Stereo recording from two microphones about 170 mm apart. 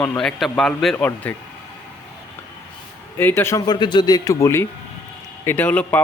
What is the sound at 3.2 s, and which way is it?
A man's voice, 15° left (ahead or behind).